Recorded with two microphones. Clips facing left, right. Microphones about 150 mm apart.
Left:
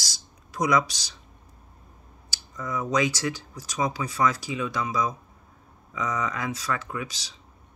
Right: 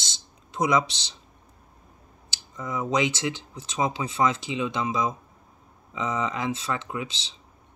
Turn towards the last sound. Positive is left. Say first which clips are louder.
# right 1 dB
turn(degrees=-25)  # may be behind; listen again after turning